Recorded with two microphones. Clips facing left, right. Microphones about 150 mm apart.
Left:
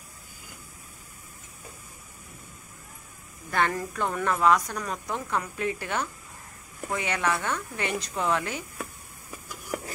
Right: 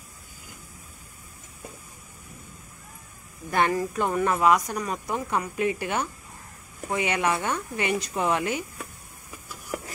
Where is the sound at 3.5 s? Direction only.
15° right (ahead or behind).